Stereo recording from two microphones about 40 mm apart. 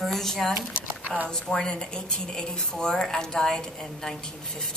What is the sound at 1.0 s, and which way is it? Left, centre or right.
Speech, right.